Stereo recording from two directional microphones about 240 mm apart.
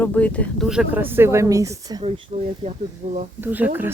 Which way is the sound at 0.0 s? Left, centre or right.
Centre.